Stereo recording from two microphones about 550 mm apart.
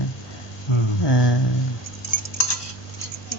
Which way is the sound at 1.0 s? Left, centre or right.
Left.